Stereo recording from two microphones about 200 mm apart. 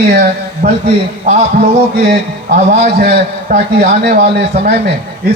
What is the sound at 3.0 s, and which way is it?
A man's voice, 50° right (ahead or behind).